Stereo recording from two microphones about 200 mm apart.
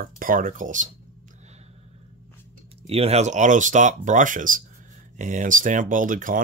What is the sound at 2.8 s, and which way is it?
Speech, 30° right (ahead or behind).